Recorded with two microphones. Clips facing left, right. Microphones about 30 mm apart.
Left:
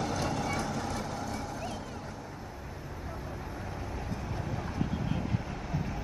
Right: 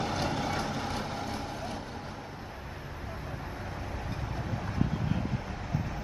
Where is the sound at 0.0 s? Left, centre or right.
Right.